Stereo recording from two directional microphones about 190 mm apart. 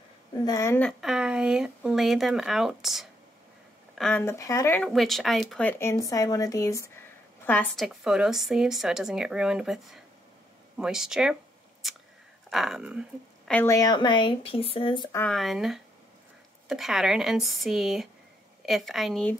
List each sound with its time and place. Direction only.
0.5 s speech: 15° left (ahead or behind)
0.8 s speech: 5° right (ahead or behind)
4.0 s speech: 10° left (ahead or behind)
4.8 s speech: centre (ahead or behind)
10.8 s speech: 5° right (ahead or behind)
13.5 s speech: 10° left (ahead or behind); by 15.0 s 25° left (ahead or behind)
15.1 s speech: 5° left (ahead or behind)